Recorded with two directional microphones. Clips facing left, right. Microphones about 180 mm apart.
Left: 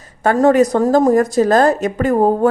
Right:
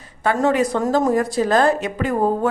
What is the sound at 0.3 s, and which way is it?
A woman's voice, 45° left (ahead or behind).